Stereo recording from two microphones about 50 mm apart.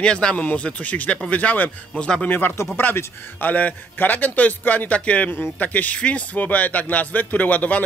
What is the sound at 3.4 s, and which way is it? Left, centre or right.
A man's voice, left.